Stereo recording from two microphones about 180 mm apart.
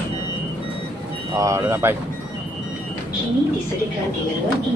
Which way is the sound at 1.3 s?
15° right (ahead or behind).